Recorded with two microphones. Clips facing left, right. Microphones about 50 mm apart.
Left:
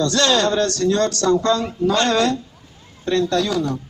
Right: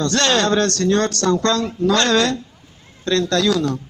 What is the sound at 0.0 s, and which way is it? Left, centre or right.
Speech, right.